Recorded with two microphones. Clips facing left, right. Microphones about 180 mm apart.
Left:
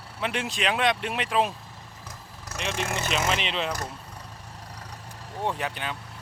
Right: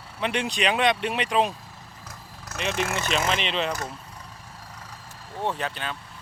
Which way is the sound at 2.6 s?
5° right (ahead or behind).